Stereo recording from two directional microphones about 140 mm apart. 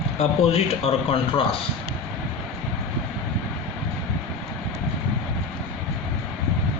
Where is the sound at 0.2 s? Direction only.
45° left (ahead or behind).